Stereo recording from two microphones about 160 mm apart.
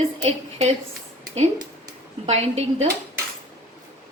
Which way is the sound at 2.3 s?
40° right (ahead or behind).